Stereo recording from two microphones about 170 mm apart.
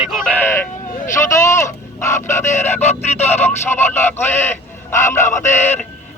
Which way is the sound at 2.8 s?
40° left (ahead or behind).